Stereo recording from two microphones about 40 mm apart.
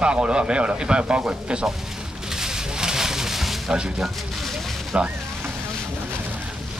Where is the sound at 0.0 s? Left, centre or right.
Right.